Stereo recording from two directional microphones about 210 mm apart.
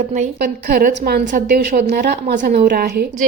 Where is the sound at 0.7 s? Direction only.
45° right (ahead or behind).